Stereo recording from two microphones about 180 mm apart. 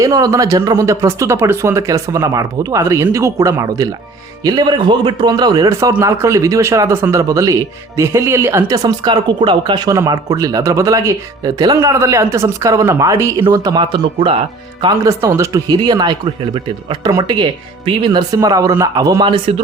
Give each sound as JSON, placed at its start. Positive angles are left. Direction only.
{"t": 0.0, "sound": "speech", "side_deg": -20}